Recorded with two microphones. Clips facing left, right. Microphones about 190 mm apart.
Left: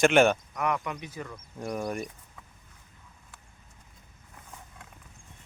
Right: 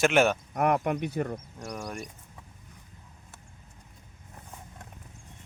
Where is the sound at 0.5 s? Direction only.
50° right (ahead or behind).